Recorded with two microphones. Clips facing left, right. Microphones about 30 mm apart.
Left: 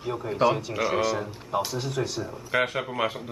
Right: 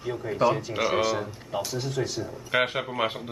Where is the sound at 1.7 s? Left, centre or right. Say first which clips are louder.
Even; centre.